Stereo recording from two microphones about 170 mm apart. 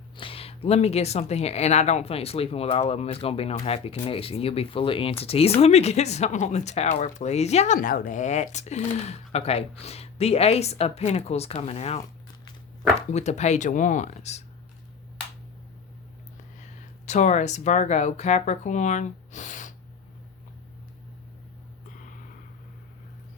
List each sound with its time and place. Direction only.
0.2 s speech: 35° left (ahead or behind)
13.1 s speech: 40° left (ahead or behind)
17.1 s speech: 45° left (ahead or behind)